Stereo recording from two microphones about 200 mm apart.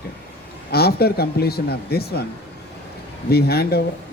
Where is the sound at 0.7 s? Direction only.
50° left (ahead or behind).